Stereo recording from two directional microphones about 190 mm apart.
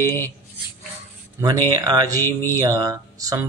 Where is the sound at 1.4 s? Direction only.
20° right (ahead or behind).